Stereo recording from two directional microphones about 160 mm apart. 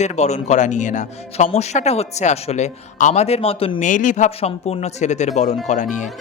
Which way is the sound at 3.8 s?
55° left (ahead or behind).